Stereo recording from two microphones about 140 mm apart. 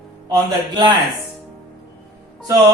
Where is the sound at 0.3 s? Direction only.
30° right (ahead or behind).